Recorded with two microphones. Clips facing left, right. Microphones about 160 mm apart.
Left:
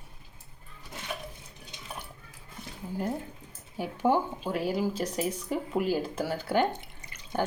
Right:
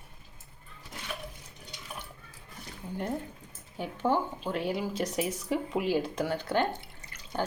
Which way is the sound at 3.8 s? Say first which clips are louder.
Left 2 dB; 10° left (ahead or behind).